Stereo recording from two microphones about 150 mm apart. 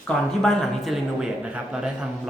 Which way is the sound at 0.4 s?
Centre (ahead or behind).